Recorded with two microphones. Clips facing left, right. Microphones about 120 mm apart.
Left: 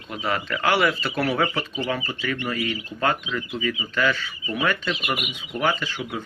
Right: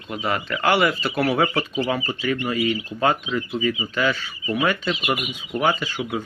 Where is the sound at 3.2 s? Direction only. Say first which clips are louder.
Right 4 dB; 25° right (ahead or behind).